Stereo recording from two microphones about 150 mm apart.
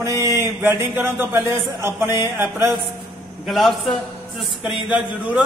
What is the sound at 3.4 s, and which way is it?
A man's voice, centre (ahead or behind).